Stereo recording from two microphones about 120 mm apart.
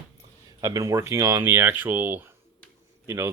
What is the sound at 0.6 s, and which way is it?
Speech, 25° right (ahead or behind).